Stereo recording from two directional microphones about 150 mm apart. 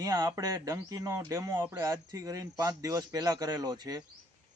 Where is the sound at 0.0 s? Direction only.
25° right (ahead or behind).